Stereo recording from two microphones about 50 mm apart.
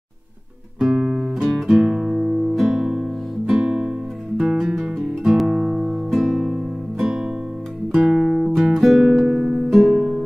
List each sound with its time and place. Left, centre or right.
0.7 s guitar: centre
1.7 s guitar: centre
3.6 s music: right
4.4 s guitar: centre
8.5 s music: centre
9.2 s music: centre